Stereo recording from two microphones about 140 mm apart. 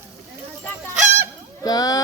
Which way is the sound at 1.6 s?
25° left (ahead or behind).